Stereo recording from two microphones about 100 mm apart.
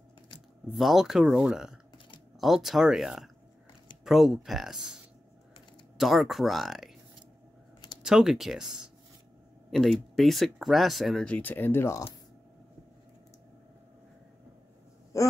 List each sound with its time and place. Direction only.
0.7 s speech: 5° right (ahead or behind)
5.9 s speech: centre (ahead or behind)
8.0 s speech: 5° right (ahead or behind)
11.2 s speech: 15° left (ahead or behind)